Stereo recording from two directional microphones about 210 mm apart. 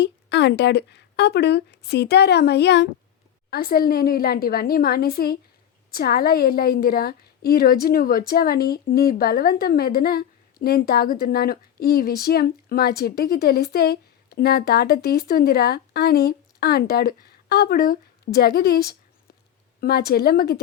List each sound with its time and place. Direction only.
0.0 s a woman's voice: 55° left (ahead or behind)